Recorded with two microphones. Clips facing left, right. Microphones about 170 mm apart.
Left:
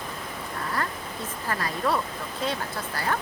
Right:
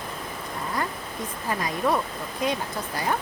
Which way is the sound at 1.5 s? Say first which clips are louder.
Right 2 dB; 15° right (ahead or behind).